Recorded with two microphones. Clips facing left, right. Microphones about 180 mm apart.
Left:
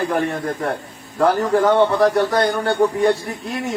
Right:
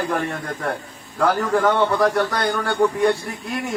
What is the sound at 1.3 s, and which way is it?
A man's voice, 25° left (ahead or behind).